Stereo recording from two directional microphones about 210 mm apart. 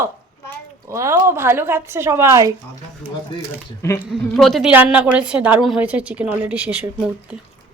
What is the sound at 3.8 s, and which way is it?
A woman's voice, 10° left (ahead or behind).